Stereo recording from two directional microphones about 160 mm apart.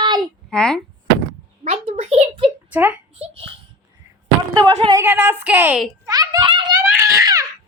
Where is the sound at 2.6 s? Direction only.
10° right (ahead or behind).